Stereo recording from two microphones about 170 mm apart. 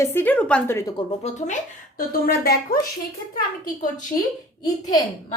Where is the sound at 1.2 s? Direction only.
45° left (ahead or behind).